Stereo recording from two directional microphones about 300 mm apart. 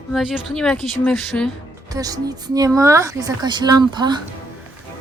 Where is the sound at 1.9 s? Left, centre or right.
Centre.